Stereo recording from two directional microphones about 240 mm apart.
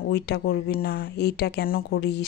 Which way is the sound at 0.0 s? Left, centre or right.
Left.